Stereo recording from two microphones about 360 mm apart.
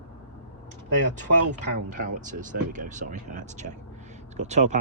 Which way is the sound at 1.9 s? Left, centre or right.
Right.